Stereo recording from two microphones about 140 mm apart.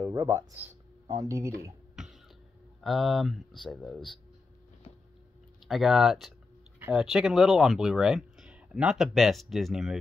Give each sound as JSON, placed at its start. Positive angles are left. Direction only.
{"t": 0.0, "sound": "speech", "side_deg": -20}
{"t": 2.0, "sound": "cough", "side_deg": -5}
{"t": 2.8, "sound": "speech", "side_deg": 0}
{"t": 5.7, "sound": "speech", "side_deg": 0}